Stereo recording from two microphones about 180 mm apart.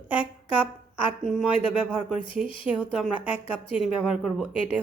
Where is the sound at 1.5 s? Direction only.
30° left (ahead or behind).